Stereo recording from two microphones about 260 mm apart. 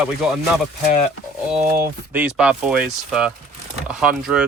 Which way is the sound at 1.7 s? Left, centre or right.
Centre.